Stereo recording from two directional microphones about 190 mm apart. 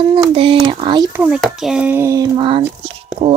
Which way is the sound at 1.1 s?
5° right (ahead or behind).